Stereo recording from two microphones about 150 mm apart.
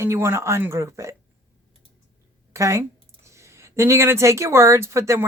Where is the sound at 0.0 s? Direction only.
15° right (ahead or behind).